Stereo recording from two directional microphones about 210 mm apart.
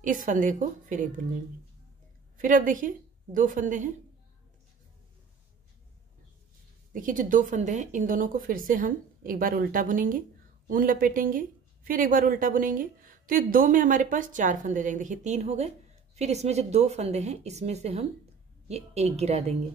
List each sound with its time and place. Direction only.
0.0 s speech: 40° right (ahead or behind)
2.3 s a woman's voice: 40° right (ahead or behind)
6.9 s speech: 40° right (ahead or behind)